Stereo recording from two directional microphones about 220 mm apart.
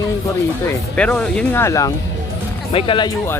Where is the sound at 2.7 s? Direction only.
25° left (ahead or behind).